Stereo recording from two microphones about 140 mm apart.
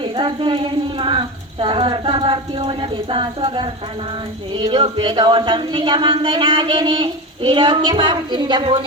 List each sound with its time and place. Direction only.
0.0 s speech: 35° right (ahead or behind)